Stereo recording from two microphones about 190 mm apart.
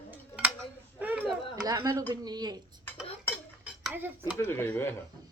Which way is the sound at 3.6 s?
10° right (ahead or behind).